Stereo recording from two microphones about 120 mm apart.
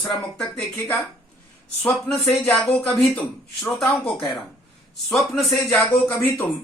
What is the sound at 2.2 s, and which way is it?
Speech, 20° left (ahead or behind).